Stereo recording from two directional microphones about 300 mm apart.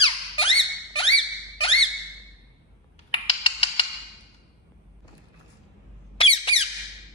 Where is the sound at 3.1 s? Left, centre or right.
Centre.